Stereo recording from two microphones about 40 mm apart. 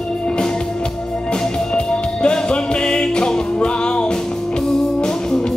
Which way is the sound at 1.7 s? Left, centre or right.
Left.